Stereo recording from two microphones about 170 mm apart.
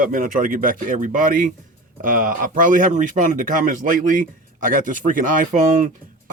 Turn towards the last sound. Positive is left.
turn(degrees=-50)  # may be behind; listen again after turning